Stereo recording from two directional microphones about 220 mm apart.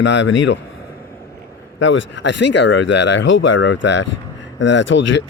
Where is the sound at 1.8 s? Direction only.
55° left (ahead or behind).